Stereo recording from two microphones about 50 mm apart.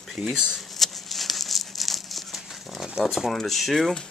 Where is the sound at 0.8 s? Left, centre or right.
Centre.